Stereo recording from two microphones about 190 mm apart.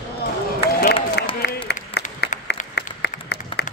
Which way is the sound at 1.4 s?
60° left (ahead or behind).